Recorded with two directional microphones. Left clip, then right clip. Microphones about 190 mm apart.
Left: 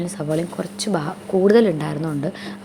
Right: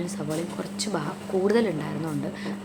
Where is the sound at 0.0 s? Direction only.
25° left (ahead or behind).